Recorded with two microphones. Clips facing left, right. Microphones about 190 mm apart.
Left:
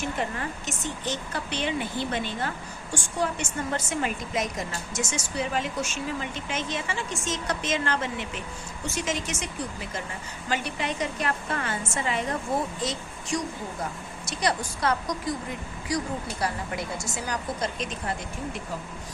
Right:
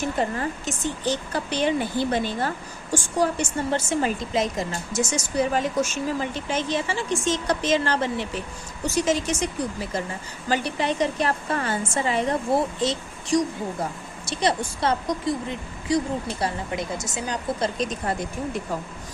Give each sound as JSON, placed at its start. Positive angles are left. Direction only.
{"t": 0.2, "sound": "a woman's voice", "side_deg": -35}
{"t": 10.5, "sound": "a woman's voice", "side_deg": -35}